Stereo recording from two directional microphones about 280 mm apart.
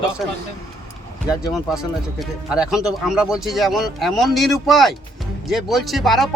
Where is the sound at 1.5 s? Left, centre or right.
Centre.